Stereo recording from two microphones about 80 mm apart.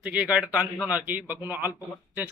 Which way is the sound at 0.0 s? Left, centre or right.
Centre.